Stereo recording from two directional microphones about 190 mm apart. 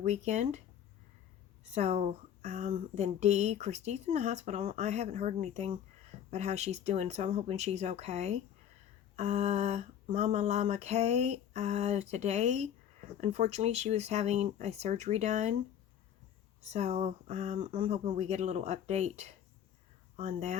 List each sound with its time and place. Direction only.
0.0 s a woman's voice: 35° right (ahead or behind)
1.7 s a woman's voice: 35° right (ahead or behind)
16.6 s a woman's voice: 35° right (ahead or behind)